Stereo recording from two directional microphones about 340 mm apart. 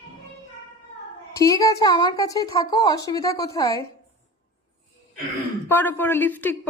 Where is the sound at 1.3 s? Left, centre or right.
Centre.